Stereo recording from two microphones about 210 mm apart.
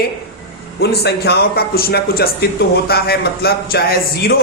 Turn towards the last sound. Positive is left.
turn(degrees=45)  # may be behind; listen again after turning